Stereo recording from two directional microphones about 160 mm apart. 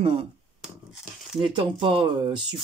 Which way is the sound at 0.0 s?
35° right (ahead or behind).